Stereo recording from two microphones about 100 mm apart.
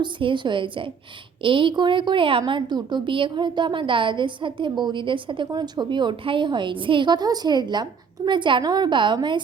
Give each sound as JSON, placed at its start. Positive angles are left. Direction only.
{"t": 0.0, "sound": "a woman's voice", "side_deg": -55}